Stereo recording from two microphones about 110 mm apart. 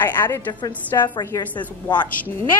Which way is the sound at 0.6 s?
40° left (ahead or behind).